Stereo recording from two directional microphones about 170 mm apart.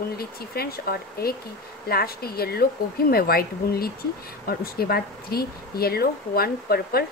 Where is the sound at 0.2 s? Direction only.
65° left (ahead or behind).